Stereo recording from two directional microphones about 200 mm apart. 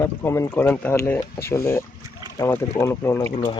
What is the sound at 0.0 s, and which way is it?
Speech, 15° left (ahead or behind).